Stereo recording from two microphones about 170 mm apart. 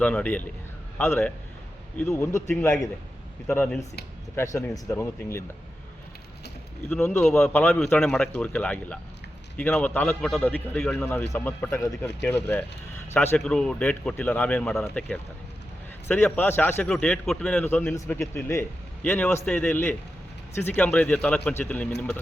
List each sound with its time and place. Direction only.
0.0 s a man's voice: 10° left (ahead or behind)
6.9 s a man's voice: 5° left (ahead or behind)